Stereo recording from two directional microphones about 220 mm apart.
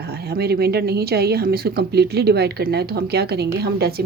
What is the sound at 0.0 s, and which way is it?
Speech, 45° right (ahead or behind).